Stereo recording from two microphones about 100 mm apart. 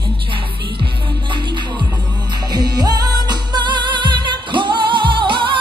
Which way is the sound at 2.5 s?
45° right (ahead or behind).